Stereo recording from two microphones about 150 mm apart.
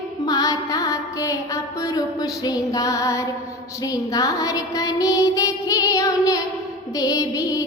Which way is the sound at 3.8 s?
25° left (ahead or behind).